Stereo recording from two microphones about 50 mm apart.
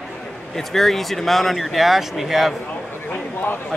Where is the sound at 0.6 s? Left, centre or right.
Centre.